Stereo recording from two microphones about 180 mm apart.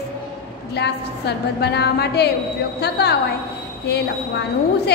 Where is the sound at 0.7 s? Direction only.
65° left (ahead or behind).